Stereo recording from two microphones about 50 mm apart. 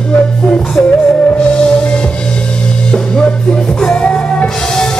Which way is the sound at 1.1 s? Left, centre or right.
Centre.